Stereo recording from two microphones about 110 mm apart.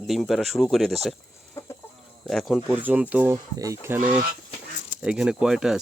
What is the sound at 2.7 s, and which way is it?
Speech, 15° right (ahead or behind).